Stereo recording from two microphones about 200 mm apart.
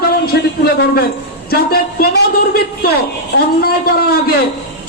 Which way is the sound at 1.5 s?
50° left (ahead or behind).